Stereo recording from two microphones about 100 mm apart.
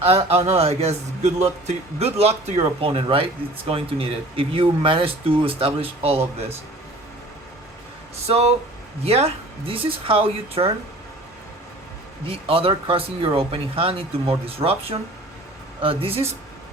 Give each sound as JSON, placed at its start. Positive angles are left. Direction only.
{"t": 0.0, "sound": "a man's voice", "side_deg": -75}
{"t": 2.0, "sound": "a man's voice", "side_deg": -90}
{"t": 8.3, "sound": "a man's voice", "side_deg": -90}
{"t": 12.2, "sound": "speech", "side_deg": -65}